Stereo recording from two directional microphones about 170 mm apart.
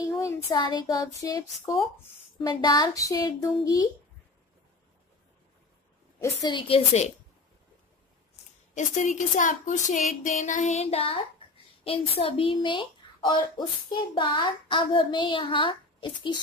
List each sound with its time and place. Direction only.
0.0 s a woman's voice: 15° left (ahead or behind)
6.2 s a woman's voice: 25° left (ahead or behind)
8.7 s speech: 45° left (ahead or behind); by 12.8 s 30° left (ahead or behind)
14.1 s a woman's voice: 30° left (ahead or behind)